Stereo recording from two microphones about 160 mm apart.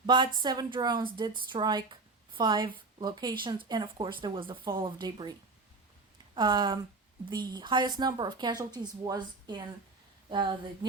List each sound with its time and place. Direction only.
0.0 s speech: 30° right (ahead or behind)
6.3 s speech: 25° right (ahead or behind)